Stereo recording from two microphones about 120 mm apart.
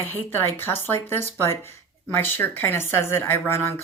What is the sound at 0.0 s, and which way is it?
Speech, 20° left (ahead or behind).